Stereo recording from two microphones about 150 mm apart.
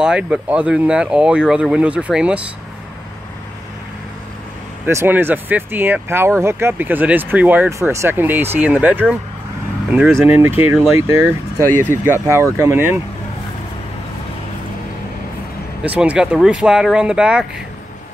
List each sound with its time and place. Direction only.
0.0 s speech: 5° right (ahead or behind)
4.8 s speech: 15° right (ahead or behind)
10.2 s speech: 15° right (ahead or behind)
15.8 s speech: 10° right (ahead or behind)